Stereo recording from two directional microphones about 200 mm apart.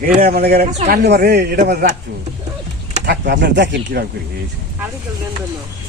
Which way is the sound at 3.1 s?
55° right (ahead or behind).